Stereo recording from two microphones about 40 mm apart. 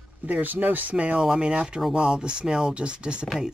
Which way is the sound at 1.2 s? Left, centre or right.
Right.